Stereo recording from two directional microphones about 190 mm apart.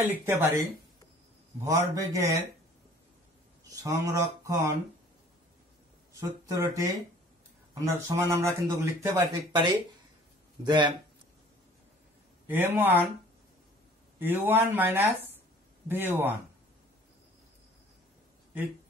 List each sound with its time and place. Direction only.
0.0 s speech: 10° right (ahead or behind)
1.7 s speech: 15° right (ahead or behind)
3.8 s speech: 15° right (ahead or behind)
6.1 s speech: 15° right (ahead or behind)
12.4 s speech: 10° right (ahead or behind)
14.2 s speech: 10° right (ahead or behind)